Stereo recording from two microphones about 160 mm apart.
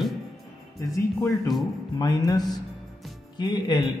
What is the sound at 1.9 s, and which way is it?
Speech, 25° left (ahead or behind).